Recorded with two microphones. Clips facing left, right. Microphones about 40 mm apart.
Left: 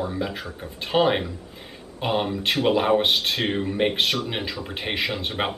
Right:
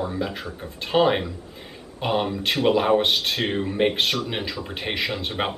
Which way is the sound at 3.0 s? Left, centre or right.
Centre.